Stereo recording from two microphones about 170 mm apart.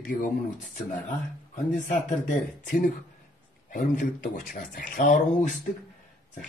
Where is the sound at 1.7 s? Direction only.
45° left (ahead or behind).